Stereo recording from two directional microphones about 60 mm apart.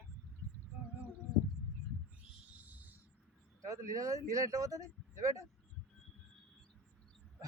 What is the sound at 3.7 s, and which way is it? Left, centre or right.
Speech, right.